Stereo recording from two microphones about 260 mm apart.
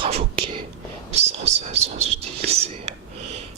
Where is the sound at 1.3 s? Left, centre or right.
Right.